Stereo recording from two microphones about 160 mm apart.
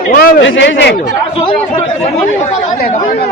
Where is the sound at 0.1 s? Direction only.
65° left (ahead or behind); by 0.9 s 90° left.